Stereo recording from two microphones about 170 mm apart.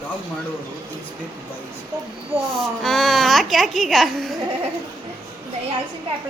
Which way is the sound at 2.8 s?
Centre (ahead or behind).